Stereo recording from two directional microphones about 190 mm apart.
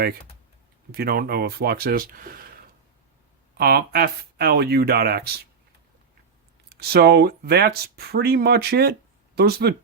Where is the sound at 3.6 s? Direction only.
55° right (ahead or behind).